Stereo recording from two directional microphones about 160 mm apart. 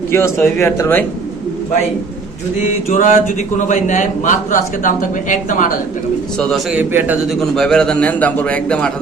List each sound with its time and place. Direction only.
0.1 s a man's voice: 15° left (ahead or behind)
2.9 s a man's voice: 55° left (ahead or behind)
6.4 s speech: 5° left (ahead or behind)
6.7 s speech: 10° right (ahead or behind)
7.5 s a man's voice: 5° left (ahead or behind)